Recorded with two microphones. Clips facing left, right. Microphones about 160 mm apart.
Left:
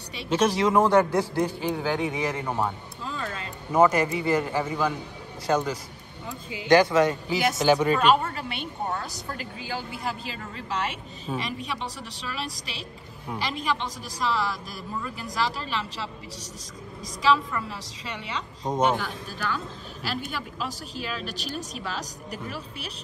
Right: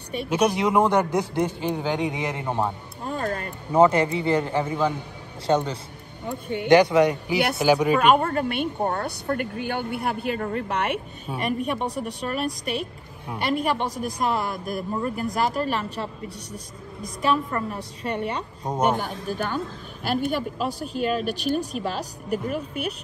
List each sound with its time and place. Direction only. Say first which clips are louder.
0.3 s a man's voice: even; 15° right (ahead or behind)
3.0 s music: right 7 dB; 50° right (ahead or behind)
3.7 s a man's voice: right 2 dB; 25° right (ahead or behind)
6.2 s a woman's voice: right 8 dB; 60° right (ahead or behind)
6.7 s a man's voice: right 2 dB; 20° right (ahead or behind)
7.3 s a woman's voice: right 1 dB; 65° right (ahead or behind)
7.6 s speech: right 2 dB; 10° right (ahead or behind)
8.0 s a woman's voice: right 3 dB; 55° right (ahead or behind)
17.5 s speech: right 4 dB; 50° right (ahead or behind)